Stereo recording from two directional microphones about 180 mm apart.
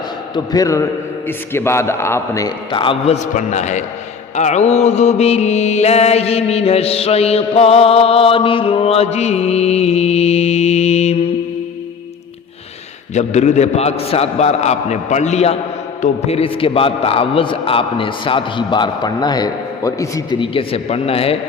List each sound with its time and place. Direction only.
0.3 s a man's voice: 20° left (ahead or behind)
3.3 s mantra: 40° left (ahead or behind)
13.1 s mantra: 40° left (ahead or behind)